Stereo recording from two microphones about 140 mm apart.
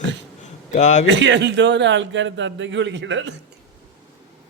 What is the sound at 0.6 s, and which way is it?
Speech, 60° left (ahead or behind).